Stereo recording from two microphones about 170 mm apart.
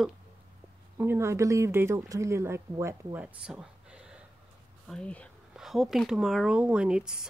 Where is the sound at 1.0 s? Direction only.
15° right (ahead or behind).